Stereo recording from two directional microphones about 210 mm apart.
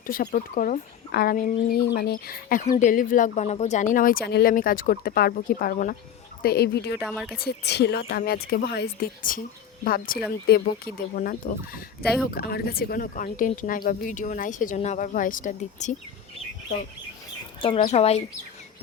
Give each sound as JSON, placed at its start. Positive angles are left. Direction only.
{"t": 0.1, "sound": "speech", "side_deg": 40}
{"t": 7.1, "sound": "speech", "side_deg": 0}
{"t": 7.4, "sound": "speech", "side_deg": 55}
{"t": 17.6, "sound": "speech", "side_deg": 25}